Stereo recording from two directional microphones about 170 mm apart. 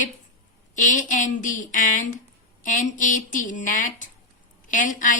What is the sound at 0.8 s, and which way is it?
A woman's voice, 50° left (ahead or behind).